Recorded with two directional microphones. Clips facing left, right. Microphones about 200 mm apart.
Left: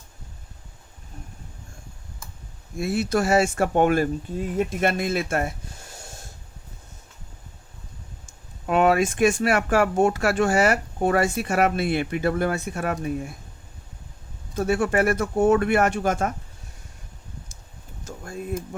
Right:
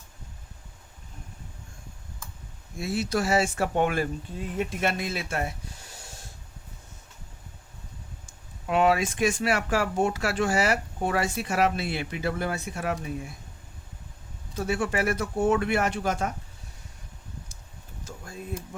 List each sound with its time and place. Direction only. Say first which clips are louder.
2.7 s speech: left 4 dB; 55° left (ahead or behind)
8.6 s speech: left 3 dB; 50° left (ahead or behind)
14.5 s speech: left 6 dB; 50° left (ahead or behind)
18.0 s a sound: left 6 dB; 50° left (ahead or behind)